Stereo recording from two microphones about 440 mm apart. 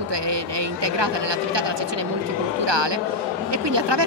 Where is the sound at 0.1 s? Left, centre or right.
Right.